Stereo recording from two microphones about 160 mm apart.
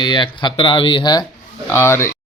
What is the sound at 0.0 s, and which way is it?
Speech, 30° left (ahead or behind).